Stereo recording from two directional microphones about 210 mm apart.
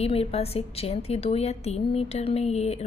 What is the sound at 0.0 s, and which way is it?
A woman's voice, 30° left (ahead or behind).